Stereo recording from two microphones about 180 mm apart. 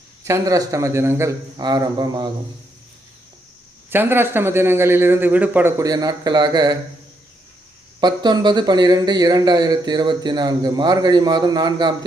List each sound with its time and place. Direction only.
0.3 s a man's voice: 15° right (ahead or behind)
3.8 s a man's voice: 10° right (ahead or behind)
8.0 s speech: 25° right (ahead or behind)